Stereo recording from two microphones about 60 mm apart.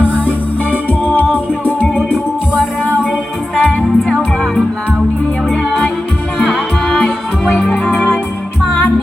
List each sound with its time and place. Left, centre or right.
1.0 s music: left
3.5 s music: centre
5.5 s music: centre
6.9 s music: centre
7.7 s music: left